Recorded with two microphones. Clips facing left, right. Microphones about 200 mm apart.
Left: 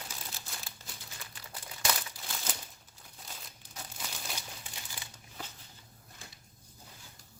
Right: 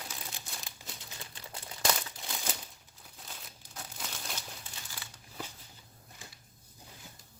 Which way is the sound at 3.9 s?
5° left (ahead or behind).